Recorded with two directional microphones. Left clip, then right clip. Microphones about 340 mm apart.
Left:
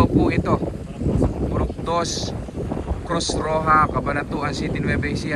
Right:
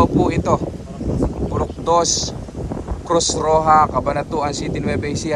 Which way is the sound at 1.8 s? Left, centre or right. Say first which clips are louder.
Right 8 dB; centre.